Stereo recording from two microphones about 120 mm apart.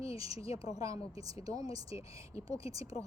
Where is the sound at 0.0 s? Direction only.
30° right (ahead or behind).